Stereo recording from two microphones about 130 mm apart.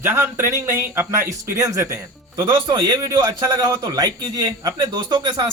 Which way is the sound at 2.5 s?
35° right (ahead or behind).